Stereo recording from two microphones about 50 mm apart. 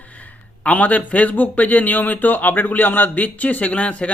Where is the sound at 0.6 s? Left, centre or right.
Left.